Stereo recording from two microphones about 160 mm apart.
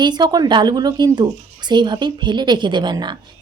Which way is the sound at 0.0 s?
25° right (ahead or behind).